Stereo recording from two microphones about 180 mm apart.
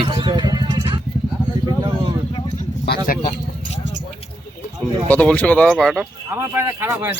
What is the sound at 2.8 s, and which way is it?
Speech, 50° left (ahead or behind).